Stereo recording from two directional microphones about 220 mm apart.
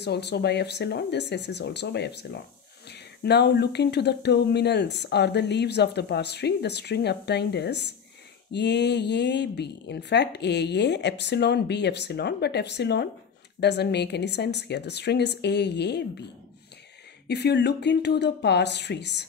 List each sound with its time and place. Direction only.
0.0 s speech: 50° left (ahead or behind)
17.3 s speech: 50° left (ahead or behind)